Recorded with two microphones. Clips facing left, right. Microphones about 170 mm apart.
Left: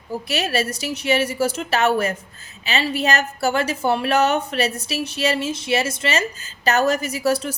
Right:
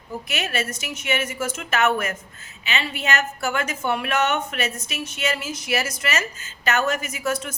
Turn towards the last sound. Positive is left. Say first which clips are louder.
# left 6 dB
turn(degrees=35)  # may be behind; listen again after turning